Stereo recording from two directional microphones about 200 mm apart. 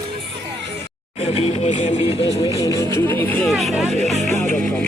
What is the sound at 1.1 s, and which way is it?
Speech, 30° left (ahead or behind).